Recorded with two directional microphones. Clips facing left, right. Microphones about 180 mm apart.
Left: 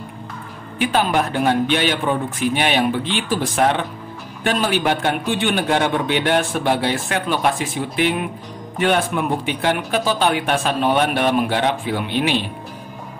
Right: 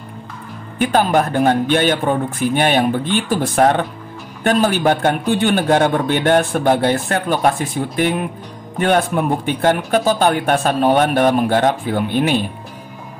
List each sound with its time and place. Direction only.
0.7 s speech: 45° right (ahead or behind)